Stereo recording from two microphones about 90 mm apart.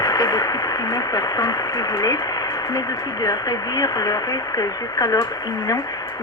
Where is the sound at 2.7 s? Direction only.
45° left (ahead or behind).